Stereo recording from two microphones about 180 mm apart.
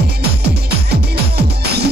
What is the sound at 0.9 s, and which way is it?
Music, 65° right (ahead or behind).